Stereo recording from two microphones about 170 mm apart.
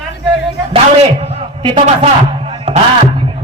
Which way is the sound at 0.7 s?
30° right (ahead or behind).